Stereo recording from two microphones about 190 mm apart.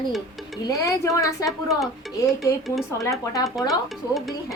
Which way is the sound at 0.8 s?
15° left (ahead or behind).